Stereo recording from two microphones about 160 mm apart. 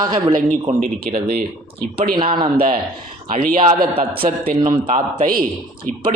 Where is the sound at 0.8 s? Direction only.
60° right (ahead or behind).